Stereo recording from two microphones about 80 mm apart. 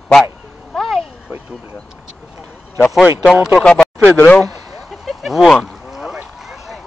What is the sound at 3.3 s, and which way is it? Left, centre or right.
Speech, centre.